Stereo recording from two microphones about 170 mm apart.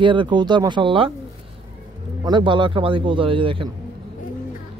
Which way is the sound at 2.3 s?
25° right (ahead or behind).